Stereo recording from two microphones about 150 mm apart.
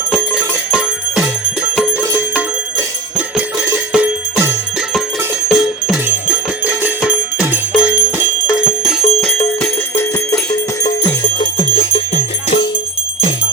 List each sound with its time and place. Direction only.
0.1 s bell: 5° right (ahead or behind)
3.9 s jingle bell: 10° right (ahead or behind)
5.5 s music: centre (ahead or behind)
7.8 s bell: 10° right (ahead or behind)
9.6 s bell: 15° left (ahead or behind)
10.8 s music: 25° left (ahead or behind); by 12.6 s 40° left (ahead or behind)